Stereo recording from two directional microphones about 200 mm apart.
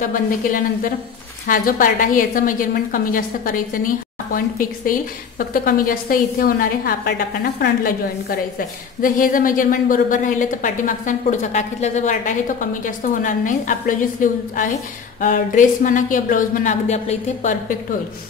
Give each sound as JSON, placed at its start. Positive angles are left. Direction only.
{"t": 0.0, "sound": "a woman's voice", "side_deg": 40}